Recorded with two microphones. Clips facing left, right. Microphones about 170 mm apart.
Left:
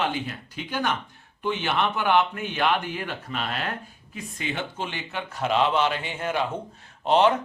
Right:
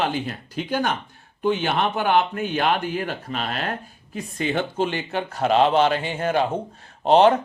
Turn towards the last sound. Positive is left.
turn(degrees=-35)  # may be behind; listen again after turning